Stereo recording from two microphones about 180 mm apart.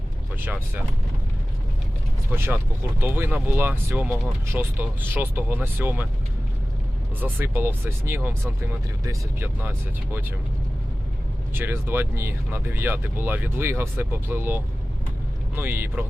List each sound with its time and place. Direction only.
0.3 s speech: 10° right (ahead or behind)
3.0 s speech: 10° right (ahead or behind)
7.2 s speech: 10° right (ahead or behind)
11.5 s speech: 10° right (ahead or behind)